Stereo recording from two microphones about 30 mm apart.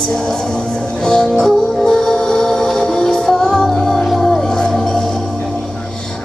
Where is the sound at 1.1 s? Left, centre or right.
Left; by 4.6 s centre.